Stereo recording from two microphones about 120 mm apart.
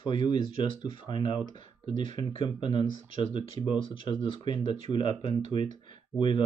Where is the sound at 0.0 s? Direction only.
40° left (ahead or behind).